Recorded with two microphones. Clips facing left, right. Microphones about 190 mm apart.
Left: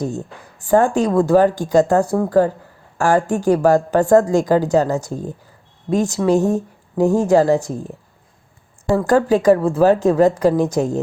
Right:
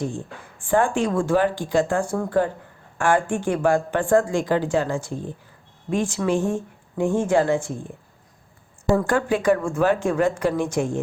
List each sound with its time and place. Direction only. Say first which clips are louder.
0.0 s speech: left 4 dB; 40° left (ahead or behind)
9.0 s speech: left 7 dB; 40° left (ahead or behind)